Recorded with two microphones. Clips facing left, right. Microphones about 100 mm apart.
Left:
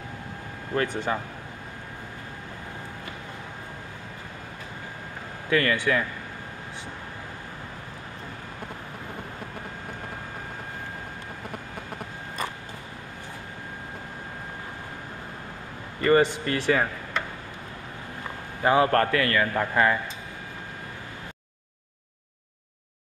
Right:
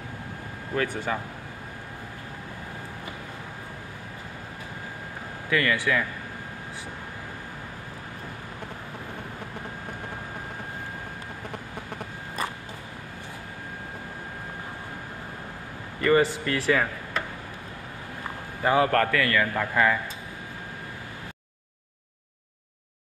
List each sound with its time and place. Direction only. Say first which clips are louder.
0.8 s a man's voice: left 1 dB; 20° left (ahead or behind)
5.5 s speech: left 1 dB; 35° left (ahead or behind)
16.0 s a man's voice: left 1 dB; 25° left (ahead or behind)
18.6 s a man's voice: left 1 dB; 25° left (ahead or behind)